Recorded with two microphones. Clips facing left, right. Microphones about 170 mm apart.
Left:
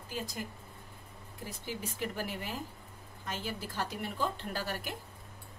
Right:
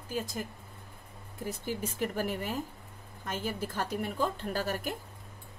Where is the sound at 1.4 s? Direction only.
50° right (ahead or behind).